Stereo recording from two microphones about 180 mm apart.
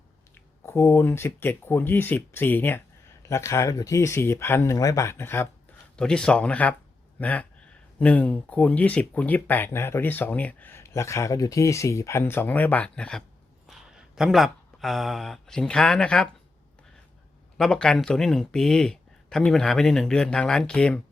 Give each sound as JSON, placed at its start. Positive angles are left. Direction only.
{"t": 0.3, "sound": "speech", "side_deg": 15}
{"t": 17.6, "sound": "speech", "side_deg": 5}